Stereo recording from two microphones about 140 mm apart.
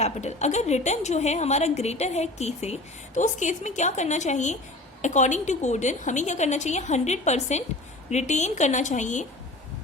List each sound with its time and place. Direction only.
0.0 s a woman's voice: 55° left (ahead or behind)